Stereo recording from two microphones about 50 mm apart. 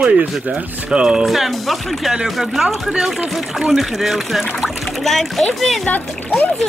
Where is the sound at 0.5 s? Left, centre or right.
Centre.